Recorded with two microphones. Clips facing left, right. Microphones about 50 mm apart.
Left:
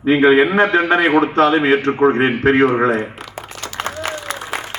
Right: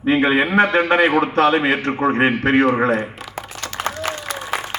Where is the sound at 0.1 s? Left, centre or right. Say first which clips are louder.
Left 4 dB; left.